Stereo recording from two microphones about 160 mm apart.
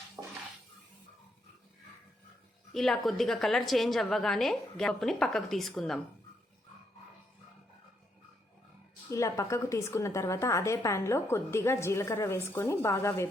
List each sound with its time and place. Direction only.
0.2 s dishes: 15° right (ahead or behind)
2.7 s a woman's voice: centre (ahead or behind)
9.0 s a woman's voice: 20° left (ahead or behind)